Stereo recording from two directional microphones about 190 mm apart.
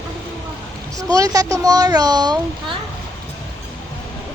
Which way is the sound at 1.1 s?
20° right (ahead or behind).